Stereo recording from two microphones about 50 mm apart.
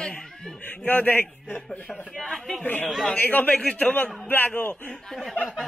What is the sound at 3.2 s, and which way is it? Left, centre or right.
A man's voice, left.